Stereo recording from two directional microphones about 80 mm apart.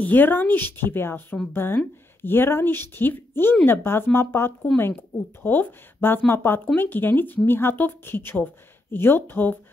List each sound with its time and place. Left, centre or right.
0.0 s speech: left